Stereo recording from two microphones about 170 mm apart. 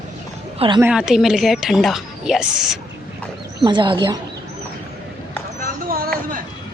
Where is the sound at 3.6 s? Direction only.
30° right (ahead or behind).